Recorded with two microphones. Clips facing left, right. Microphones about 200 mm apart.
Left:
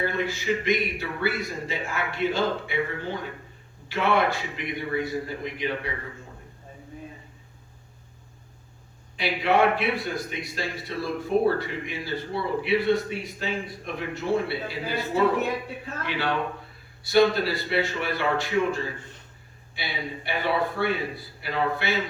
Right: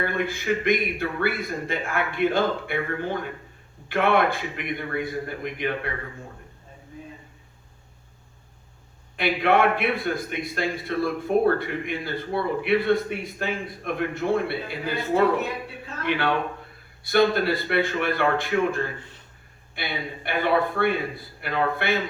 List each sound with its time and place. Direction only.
0.0 s a man's voice: 55° right (ahead or behind)
9.1 s a man's voice: 55° right (ahead or behind)